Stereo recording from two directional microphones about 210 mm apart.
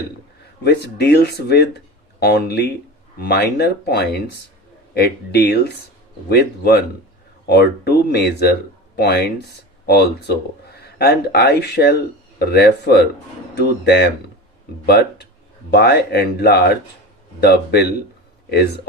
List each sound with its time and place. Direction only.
0.6 s speech: 50° left (ahead or behind)